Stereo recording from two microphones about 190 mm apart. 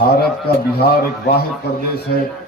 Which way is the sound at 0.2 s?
55° left (ahead or behind).